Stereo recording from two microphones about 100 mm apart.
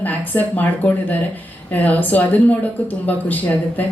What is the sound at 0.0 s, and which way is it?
A woman's voice, 15° left (ahead or behind).